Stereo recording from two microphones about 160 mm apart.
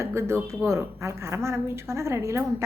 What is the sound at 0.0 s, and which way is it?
A woman's voice, 15° right (ahead or behind).